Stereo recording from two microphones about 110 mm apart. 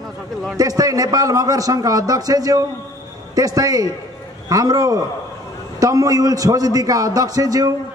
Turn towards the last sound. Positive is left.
turn(degrees=-35)  # may be behind; listen again after turning